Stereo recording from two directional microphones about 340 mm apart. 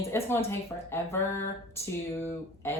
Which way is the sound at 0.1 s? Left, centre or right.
Centre.